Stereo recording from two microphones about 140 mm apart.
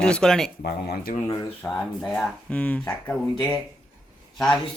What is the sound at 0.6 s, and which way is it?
Speech, 90° left.